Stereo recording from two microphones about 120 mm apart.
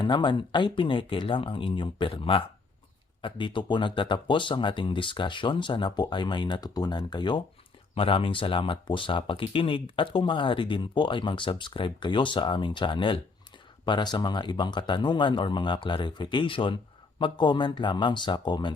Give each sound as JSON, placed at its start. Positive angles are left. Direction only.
{"t": 0.0, "sound": "speech", "side_deg": 40}